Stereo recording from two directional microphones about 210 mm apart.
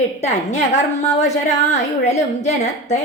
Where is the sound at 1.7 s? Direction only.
35° left (ahead or behind).